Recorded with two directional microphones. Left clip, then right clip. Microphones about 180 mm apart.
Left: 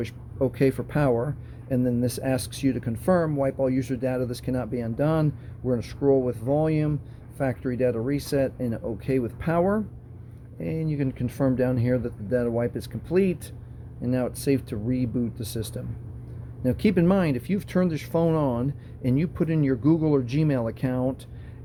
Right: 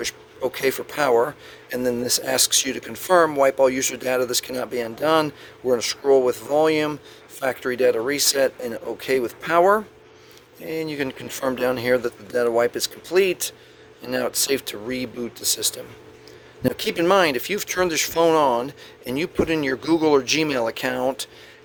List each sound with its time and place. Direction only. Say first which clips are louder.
0.5 s speech: right 3 dB; 25° right (ahead or behind)